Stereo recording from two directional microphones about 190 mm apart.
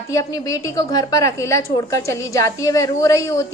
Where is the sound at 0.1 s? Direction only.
15° left (ahead or behind).